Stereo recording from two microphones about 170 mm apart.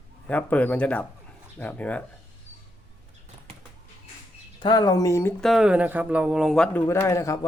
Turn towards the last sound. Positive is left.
turn(degrees=20)  # may be behind; listen again after turning